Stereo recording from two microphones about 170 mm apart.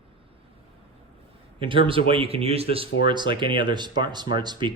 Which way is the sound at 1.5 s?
30° right (ahead or behind).